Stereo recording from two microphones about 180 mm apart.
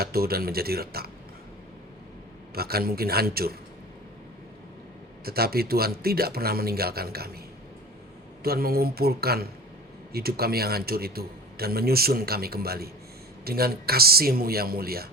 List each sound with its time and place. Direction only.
0.0 s speech: 60° right (ahead or behind)
2.6 s a man's voice: 60° right (ahead or behind)
5.2 s a man's voice: 60° right (ahead or behind)
8.4 s a man's voice: 55° right (ahead or behind)